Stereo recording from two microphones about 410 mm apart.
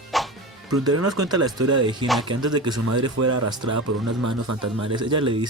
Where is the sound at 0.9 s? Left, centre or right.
Right.